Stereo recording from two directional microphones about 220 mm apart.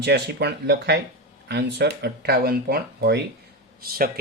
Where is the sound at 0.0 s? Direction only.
45° right (ahead or behind).